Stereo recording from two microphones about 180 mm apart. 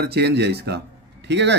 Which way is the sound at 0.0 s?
65° right (ahead or behind).